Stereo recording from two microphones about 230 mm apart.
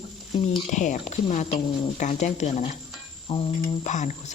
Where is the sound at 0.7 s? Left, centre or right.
Left.